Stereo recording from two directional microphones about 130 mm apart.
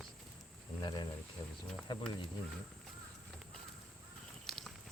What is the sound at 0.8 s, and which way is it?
Speech, 35° left (ahead or behind).